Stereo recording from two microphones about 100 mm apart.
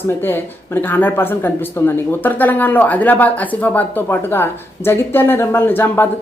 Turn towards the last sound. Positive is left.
turn(degrees=20)  # may be behind; listen again after turning